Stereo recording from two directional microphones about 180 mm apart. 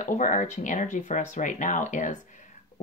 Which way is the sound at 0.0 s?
45° left (ahead or behind).